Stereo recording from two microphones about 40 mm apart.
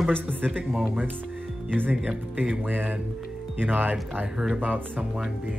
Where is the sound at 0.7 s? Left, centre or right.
Right.